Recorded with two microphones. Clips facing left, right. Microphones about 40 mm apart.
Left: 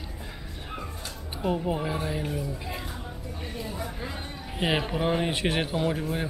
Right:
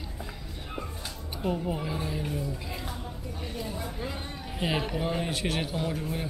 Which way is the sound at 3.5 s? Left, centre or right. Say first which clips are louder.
Left 1 dB; centre.